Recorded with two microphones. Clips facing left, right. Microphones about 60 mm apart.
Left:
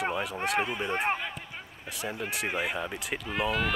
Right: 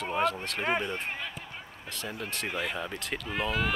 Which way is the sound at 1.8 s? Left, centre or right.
Centre.